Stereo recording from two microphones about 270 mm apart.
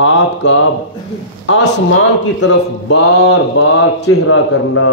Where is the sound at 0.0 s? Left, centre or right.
Left.